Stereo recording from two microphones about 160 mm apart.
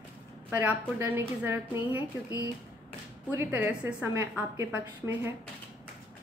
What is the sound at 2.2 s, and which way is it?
Speech, 20° left (ahead or behind).